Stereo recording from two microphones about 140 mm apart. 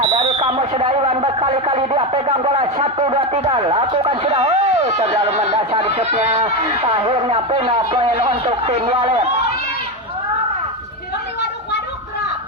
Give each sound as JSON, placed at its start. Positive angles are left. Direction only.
{"t": 0.1, "sound": "speech", "side_deg": -55}